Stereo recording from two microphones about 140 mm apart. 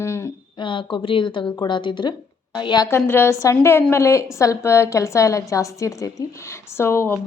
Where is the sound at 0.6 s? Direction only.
35° left (ahead or behind).